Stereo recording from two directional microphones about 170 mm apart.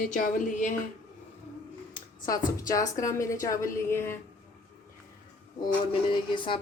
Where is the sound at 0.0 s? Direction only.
50° left (ahead or behind).